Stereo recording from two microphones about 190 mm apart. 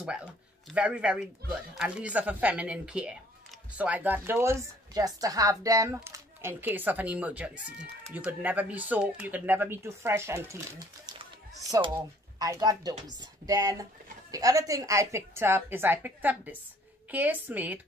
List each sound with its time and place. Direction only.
0.0 s speech: 5° right (ahead or behind)
12.4 s speech: 20° right (ahead or behind)